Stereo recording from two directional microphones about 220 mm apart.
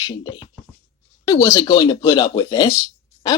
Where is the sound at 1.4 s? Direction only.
15° left (ahead or behind).